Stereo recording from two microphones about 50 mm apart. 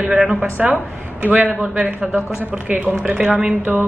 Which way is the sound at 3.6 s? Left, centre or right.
Right.